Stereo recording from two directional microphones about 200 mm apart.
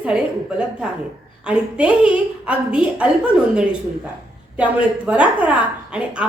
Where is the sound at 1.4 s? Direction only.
5° right (ahead or behind).